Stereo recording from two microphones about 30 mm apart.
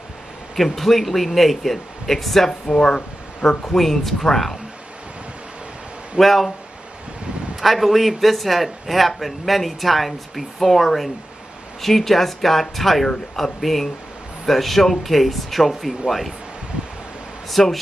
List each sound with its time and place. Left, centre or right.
0.6 s a man's voice: centre
2.7 s speech: left
3.7 s speech: centre
6.1 s a man's voice: centre
7.6 s a man's voice: centre
17.5 s speech: centre